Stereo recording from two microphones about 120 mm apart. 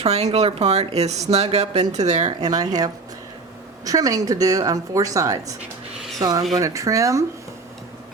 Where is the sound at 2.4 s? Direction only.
35° right (ahead or behind).